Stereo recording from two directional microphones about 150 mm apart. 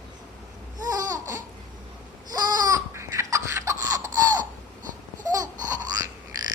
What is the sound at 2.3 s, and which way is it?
Laughter, 25° right (ahead or behind).